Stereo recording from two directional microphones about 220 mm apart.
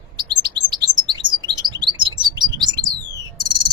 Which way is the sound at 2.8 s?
20° right (ahead or behind).